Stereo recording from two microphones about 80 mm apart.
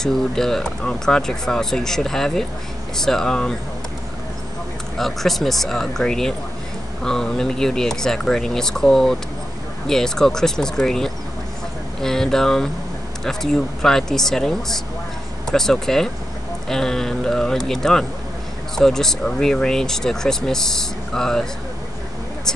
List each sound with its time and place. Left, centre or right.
0.0 s speech: centre
4.9 s speech: centre